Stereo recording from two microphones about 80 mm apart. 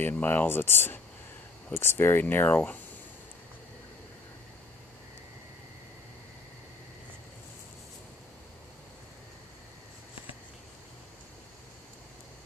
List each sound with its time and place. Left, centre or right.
0.0 s speech: left